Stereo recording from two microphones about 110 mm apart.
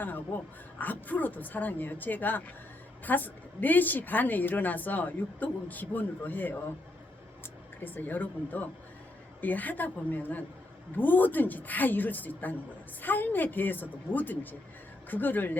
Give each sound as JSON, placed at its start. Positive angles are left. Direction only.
{"t": 0.0, "sound": "a woman's voice", "side_deg": 15}
{"t": 7.8, "sound": "a woman's voice", "side_deg": 15}